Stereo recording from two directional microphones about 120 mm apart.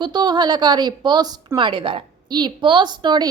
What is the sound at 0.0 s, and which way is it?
A woman's voice, 35° right (ahead or behind).